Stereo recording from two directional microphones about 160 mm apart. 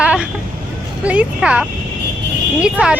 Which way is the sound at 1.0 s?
5° right (ahead or behind).